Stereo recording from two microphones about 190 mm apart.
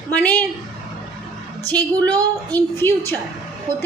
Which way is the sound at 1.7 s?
20° right (ahead or behind).